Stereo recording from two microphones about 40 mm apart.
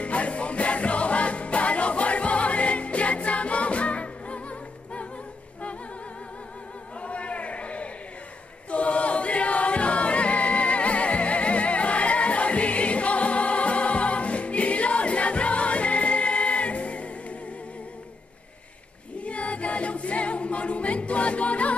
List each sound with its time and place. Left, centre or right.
0.0 s music: left
7.0 s a sound: left
8.6 s choir: left
19.2 s choir: left